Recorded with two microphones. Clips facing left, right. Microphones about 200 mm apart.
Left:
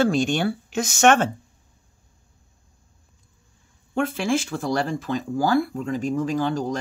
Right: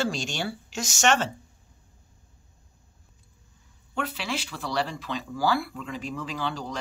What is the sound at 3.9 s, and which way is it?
Speech, 50° left (ahead or behind).